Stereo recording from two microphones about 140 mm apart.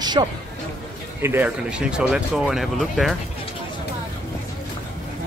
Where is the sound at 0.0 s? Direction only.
30° right (ahead or behind).